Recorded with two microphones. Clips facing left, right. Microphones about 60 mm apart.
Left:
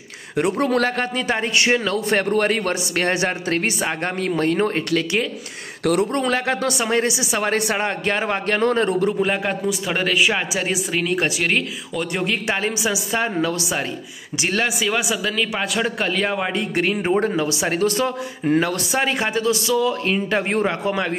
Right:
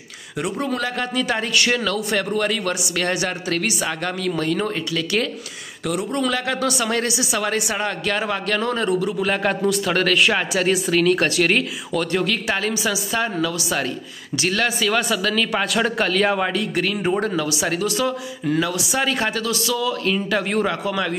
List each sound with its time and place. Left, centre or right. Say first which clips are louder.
0.4 s a man's voice: left 5 dB; left
0.9 s speech: even; left
5.9 s a man's voice: left 4 dB; left
6.2 s speech: left 1 dB; left
9.4 s speech: right 3 dB; centre
12.2 s speech: even; left
14.6 s a man's voice: right 1 dB; centre
16.5 s speech: left 1 dB; left
18.9 s speech: left 1 dB; left